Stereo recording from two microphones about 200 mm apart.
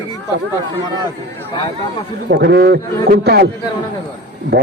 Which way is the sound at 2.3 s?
55° right (ahead or behind).